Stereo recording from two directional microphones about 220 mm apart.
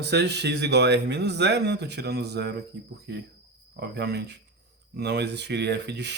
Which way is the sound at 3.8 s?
50° right (ahead or behind).